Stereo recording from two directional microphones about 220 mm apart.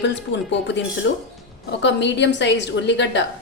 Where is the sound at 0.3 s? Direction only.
55° left (ahead or behind).